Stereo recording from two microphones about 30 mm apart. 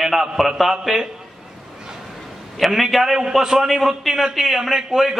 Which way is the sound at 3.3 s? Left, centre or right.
Centre.